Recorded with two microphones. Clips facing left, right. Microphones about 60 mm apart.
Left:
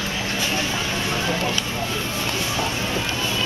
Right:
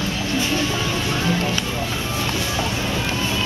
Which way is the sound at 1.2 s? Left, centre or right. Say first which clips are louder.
Right 3 dB; centre.